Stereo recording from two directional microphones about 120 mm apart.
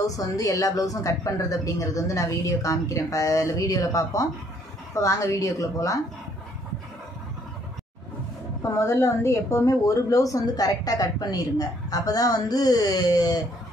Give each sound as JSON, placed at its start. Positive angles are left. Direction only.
{"t": 0.0, "sound": "a woman's voice", "side_deg": 30}
{"t": 8.6, "sound": "a woman's voice", "side_deg": 25}